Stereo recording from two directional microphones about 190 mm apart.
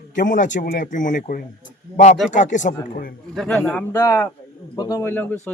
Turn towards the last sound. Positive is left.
turn(degrees=10)  # may be behind; listen again after turning